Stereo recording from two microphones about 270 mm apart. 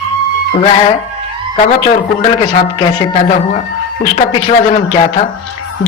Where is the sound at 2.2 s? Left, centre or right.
Centre.